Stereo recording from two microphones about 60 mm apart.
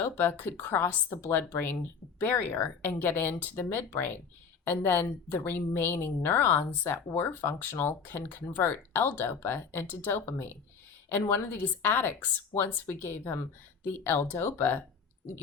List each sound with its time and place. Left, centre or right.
0.0 s a woman's voice: left